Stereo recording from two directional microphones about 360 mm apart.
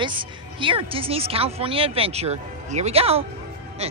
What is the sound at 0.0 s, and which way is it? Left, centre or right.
Speech, centre.